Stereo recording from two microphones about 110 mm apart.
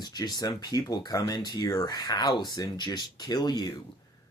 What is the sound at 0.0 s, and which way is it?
Speech, 35° left (ahead or behind).